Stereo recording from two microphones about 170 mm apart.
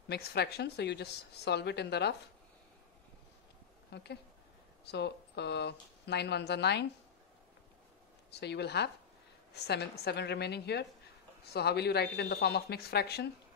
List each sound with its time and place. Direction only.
0.1 s speech: 75° left (ahead or behind)
3.9 s speech: 80° left
8.3 s speech: 80° left